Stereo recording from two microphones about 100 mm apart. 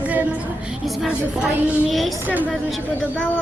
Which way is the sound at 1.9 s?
Centre (ahead or behind).